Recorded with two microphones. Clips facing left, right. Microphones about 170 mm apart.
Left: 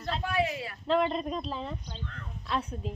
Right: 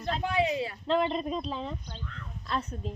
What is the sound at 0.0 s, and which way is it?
Speech, 20° right (ahead or behind).